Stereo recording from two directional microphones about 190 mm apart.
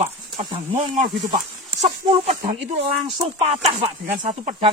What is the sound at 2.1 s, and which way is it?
Speech, 35° right (ahead or behind).